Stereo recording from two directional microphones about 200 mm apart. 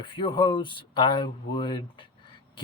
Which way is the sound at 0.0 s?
25° left (ahead or behind).